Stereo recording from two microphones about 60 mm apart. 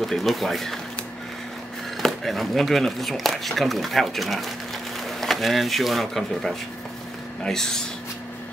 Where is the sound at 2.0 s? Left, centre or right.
Centre.